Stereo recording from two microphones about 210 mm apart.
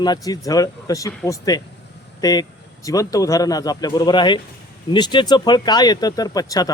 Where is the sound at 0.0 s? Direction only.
20° left (ahead or behind).